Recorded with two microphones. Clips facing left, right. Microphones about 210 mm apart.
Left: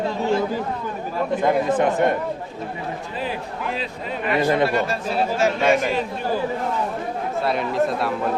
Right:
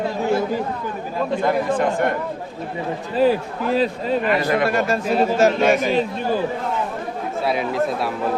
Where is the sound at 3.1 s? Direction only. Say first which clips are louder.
Right 15 dB; 40° right (ahead or behind).